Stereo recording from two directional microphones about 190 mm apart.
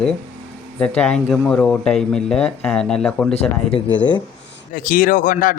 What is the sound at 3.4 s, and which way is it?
Speech, 30° left (ahead or behind).